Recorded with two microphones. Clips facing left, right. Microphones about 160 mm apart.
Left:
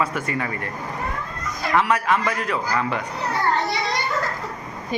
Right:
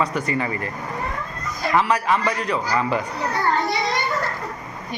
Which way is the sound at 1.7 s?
Centre (ahead or behind).